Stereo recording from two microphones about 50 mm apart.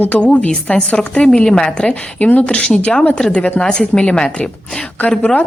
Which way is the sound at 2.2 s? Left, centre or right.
Left.